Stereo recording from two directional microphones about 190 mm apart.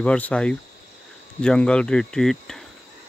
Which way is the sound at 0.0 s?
5° left (ahead or behind).